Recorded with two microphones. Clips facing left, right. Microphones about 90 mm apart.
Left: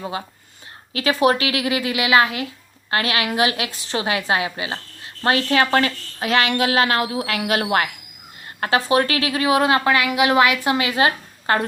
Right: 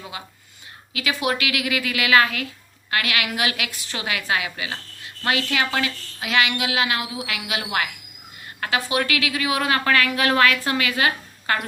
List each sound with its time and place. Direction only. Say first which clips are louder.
0.9 s a woman's voice: left 7 dB; 35° left (ahead or behind)